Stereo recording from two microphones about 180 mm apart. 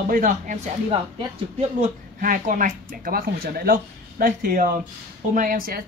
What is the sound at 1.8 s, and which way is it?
Speech, 50° right (ahead or behind).